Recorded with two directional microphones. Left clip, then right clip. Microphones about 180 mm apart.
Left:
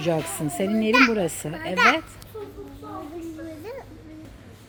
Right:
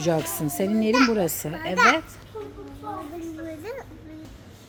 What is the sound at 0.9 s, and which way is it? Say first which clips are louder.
Speech: left 3 dB; 20° left (ahead or behind).